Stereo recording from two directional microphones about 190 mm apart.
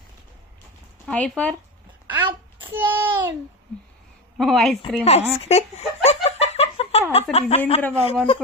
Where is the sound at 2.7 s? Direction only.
10° right (ahead or behind).